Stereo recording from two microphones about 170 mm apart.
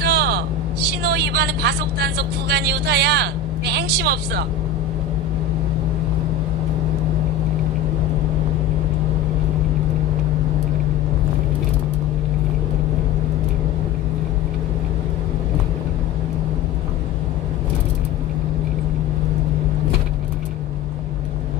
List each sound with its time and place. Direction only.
0.0 s vehicle: 70° right (ahead or behind)
0.8 s speech: 75° right (ahead or behind)